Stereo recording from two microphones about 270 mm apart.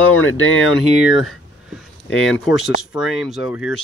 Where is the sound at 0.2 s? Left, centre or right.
Left.